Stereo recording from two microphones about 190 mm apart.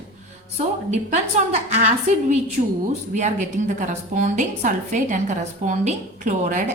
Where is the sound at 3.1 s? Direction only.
40° right (ahead or behind).